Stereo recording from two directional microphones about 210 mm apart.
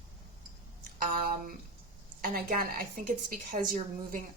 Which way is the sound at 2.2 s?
45° right (ahead or behind).